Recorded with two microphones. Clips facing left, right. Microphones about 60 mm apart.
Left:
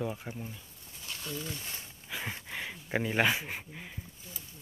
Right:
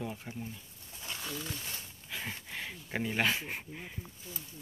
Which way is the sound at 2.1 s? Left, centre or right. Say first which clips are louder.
Left 2 dB; centre.